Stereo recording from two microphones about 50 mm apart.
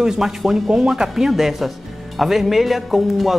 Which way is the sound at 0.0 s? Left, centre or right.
Centre.